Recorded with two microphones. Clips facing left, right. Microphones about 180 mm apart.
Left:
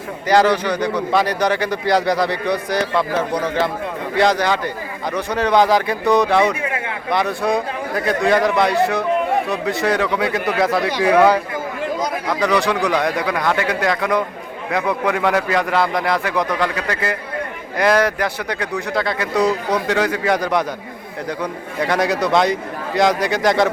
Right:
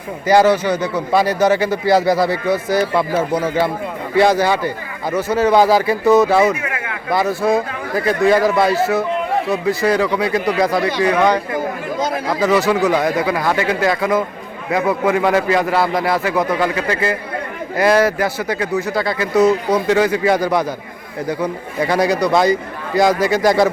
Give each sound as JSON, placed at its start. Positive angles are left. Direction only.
{"t": 0.3, "sound": "a man's voice", "side_deg": -10}
{"t": 6.6, "sound": "a sound", "side_deg": 30}
{"t": 7.1, "sound": "speech", "side_deg": -5}
{"t": 12.3, "sound": "speech", "side_deg": -5}